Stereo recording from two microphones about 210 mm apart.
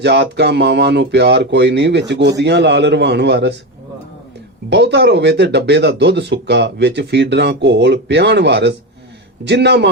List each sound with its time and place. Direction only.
0.0 s speech: 55° right (ahead or behind)
4.7 s speech: 55° right (ahead or behind)